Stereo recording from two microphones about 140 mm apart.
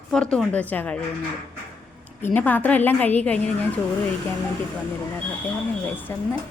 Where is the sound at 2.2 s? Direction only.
15° left (ahead or behind).